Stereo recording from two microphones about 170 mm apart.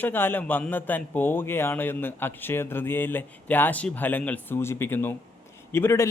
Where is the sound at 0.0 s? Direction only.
10° left (ahead or behind).